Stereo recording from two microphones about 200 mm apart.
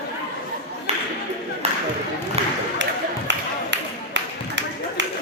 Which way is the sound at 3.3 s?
65° right (ahead or behind).